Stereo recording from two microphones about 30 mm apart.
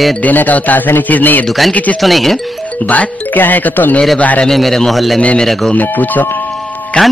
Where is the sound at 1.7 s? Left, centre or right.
Left.